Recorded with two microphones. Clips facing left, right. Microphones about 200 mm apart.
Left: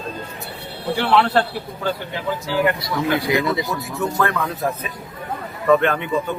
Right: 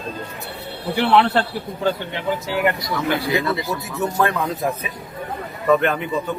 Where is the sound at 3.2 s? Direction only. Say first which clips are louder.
Left 2 dB; 15° left (ahead or behind).